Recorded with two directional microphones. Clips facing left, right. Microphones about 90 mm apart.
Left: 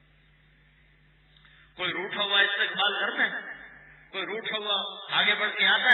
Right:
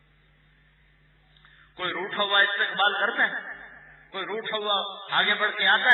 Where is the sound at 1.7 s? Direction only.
30° right (ahead or behind).